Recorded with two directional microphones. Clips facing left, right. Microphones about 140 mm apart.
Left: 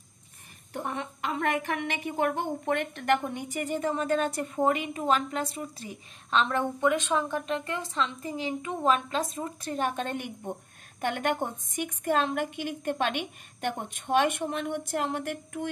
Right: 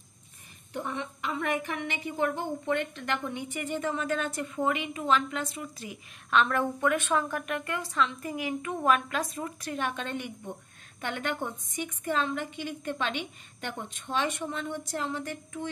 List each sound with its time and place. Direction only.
0.8 s a woman's voice: 55° left (ahead or behind); by 9.5 s 25° left (ahead or behind)
9.7 s a woman's voice: 40° left (ahead or behind); by 15.7 s 55° left (ahead or behind)